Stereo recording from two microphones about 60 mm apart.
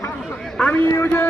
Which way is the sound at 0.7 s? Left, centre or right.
Left.